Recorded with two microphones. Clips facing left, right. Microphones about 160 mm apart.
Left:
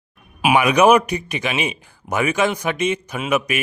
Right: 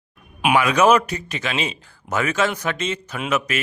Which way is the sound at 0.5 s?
15° left (ahead or behind).